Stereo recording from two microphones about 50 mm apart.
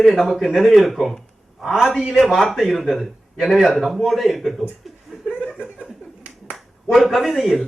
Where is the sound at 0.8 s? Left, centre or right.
Centre.